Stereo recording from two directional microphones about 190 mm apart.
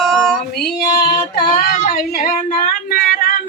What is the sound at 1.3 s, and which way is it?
Child singing, 50° left (ahead or behind).